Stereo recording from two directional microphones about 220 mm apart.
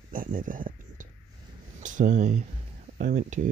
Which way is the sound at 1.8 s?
35° right (ahead or behind).